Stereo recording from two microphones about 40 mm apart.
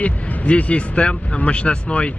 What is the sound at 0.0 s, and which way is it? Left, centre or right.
Speech, left.